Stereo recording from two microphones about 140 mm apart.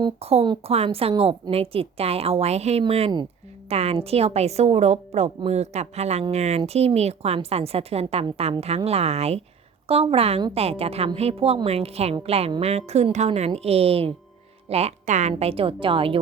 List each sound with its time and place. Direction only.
0.2 s a woman's voice: 45° right (ahead or behind)